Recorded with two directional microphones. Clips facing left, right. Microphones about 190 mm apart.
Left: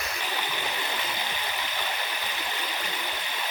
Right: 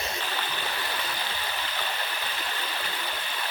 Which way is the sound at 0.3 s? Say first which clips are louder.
Left 1 dB; 15° left (ahead or behind).